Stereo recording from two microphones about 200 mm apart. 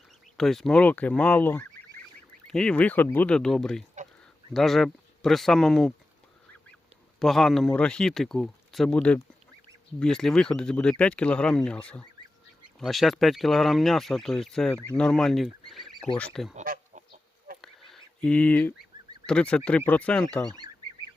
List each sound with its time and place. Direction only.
0.3 s speech: centre (ahead or behind)
7.2 s speech: centre (ahead or behind)
16.6 s chicken: 40° right (ahead or behind)
17.6 s speech: centre (ahead or behind)